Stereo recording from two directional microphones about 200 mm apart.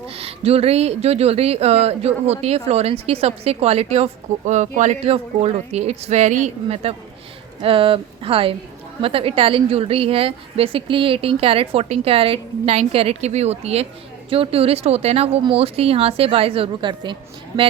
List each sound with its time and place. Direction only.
0.1 s a woman's voice: 30° right (ahead or behind)